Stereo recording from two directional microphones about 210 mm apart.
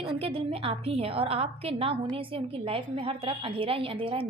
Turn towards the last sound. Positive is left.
turn(degrees=-25)  # may be behind; listen again after turning